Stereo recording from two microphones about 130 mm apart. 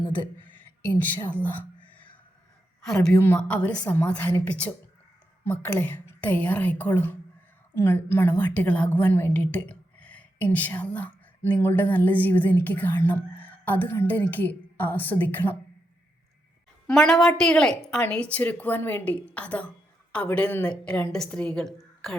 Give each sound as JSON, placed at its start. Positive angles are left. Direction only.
{"t": 0.9, "sound": "a woman's voice", "side_deg": 10}
{"t": 16.8, "sound": "a woman's voice", "side_deg": 5}